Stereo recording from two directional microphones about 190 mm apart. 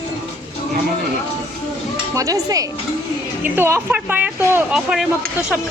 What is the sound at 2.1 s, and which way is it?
Speech, 20° right (ahead or behind).